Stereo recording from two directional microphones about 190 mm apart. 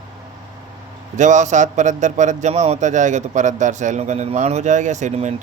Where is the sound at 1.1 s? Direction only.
40° right (ahead or behind).